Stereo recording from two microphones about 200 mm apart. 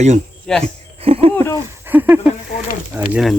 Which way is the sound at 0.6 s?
30° right (ahead or behind).